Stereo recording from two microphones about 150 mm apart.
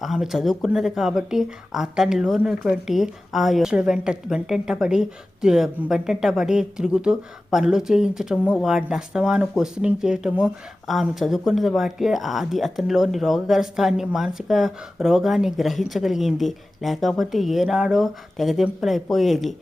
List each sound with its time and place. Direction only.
0.0 s speech: centre (ahead or behind)